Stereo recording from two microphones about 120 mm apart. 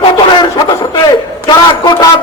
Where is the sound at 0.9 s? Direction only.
35° left (ahead or behind).